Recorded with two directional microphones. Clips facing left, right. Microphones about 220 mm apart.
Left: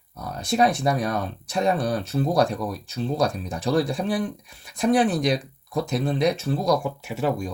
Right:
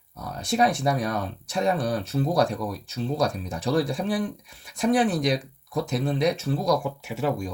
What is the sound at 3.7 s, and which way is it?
Speech, 35° left (ahead or behind).